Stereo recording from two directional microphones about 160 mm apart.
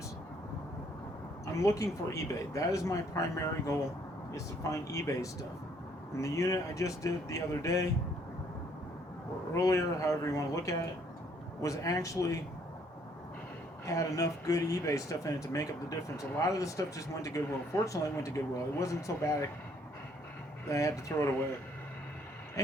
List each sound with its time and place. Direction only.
1.5 s speech: 20° left (ahead or behind)
9.6 s speech: 20° left (ahead or behind)
13.8 s speech: 20° left (ahead or behind)
20.7 s speech: 20° left (ahead or behind)